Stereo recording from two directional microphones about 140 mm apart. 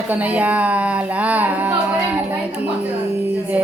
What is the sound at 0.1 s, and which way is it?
Speech, 10° right (ahead or behind).